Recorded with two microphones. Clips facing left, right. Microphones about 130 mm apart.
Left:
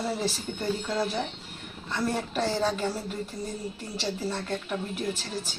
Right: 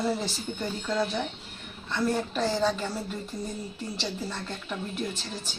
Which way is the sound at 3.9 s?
5° left (ahead or behind).